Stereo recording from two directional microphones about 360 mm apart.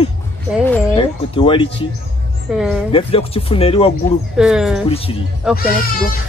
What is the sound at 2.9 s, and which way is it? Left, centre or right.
Speech, centre.